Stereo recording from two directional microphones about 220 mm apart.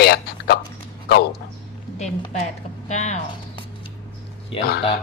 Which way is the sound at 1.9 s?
30° left (ahead or behind).